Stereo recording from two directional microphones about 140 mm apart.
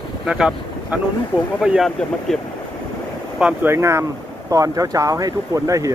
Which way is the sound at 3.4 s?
15° right (ahead or behind).